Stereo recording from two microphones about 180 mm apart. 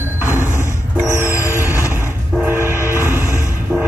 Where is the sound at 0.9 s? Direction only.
15° right (ahead or behind).